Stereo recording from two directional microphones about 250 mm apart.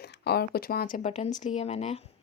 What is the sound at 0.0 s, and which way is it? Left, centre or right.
Speech, left.